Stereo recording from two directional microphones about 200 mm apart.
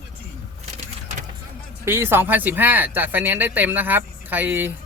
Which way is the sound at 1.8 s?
10° right (ahead or behind).